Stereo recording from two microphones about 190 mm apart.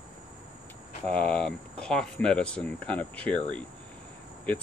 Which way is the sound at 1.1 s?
5° left (ahead or behind).